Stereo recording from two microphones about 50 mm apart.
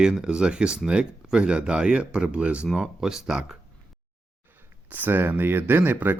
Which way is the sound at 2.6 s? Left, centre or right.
Centre.